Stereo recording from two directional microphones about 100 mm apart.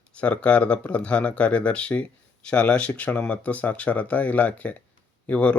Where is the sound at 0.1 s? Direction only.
10° left (ahead or behind).